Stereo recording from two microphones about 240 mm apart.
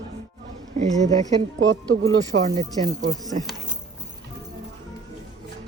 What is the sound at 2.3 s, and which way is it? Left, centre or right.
Speech, right.